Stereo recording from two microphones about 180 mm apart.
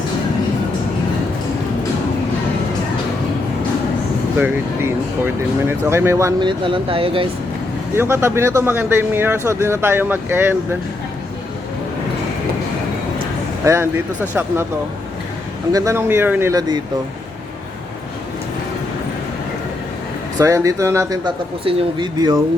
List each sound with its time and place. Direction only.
4.4 s speech: 10° right (ahead or behind); by 7.3 s 30° right (ahead or behind)
7.9 s speech: 15° right (ahead or behind)
13.7 s speech: 20° right (ahead or behind)
15.7 s speech: 15° right (ahead or behind)
20.4 s speech: 15° right (ahead or behind)
21.6 s speech: 30° right (ahead or behind)